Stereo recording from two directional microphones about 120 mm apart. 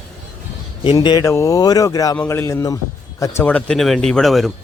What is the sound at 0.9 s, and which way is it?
A man's voice, 30° left (ahead or behind).